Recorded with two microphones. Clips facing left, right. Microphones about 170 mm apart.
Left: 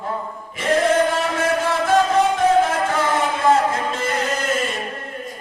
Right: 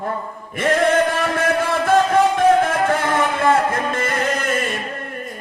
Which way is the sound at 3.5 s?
55° right (ahead or behind).